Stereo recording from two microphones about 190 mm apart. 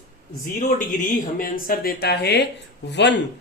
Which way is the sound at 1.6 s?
55° left (ahead or behind).